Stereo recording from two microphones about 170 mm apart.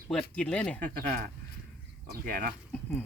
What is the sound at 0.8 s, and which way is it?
Speech, 60° right (ahead or behind).